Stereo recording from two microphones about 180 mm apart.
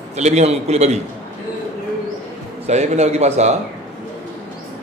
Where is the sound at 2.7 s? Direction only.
40° right (ahead or behind).